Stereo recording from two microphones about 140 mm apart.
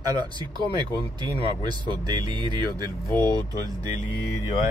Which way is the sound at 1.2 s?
30° right (ahead or behind).